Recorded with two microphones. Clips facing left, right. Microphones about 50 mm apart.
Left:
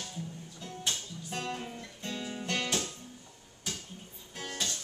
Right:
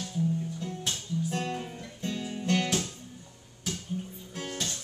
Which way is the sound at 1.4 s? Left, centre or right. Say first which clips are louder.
Right 3 dB; centre.